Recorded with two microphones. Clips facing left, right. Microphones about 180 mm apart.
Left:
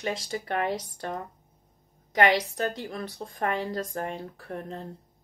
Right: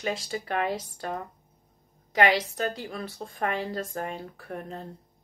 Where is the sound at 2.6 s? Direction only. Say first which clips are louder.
Even; 40° left (ahead or behind).